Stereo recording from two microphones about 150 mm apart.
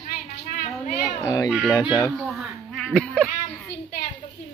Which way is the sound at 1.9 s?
5° left (ahead or behind).